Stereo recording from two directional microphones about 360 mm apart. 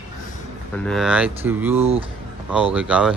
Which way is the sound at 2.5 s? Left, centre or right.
Centre.